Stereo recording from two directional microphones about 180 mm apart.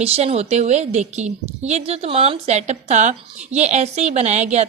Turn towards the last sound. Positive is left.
turn(degrees=-40)  # may be behind; listen again after turning